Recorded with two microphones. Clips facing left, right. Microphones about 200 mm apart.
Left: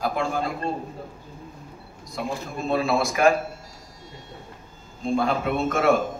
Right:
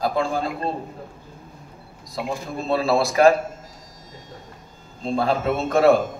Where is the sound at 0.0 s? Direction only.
35° right (ahead or behind).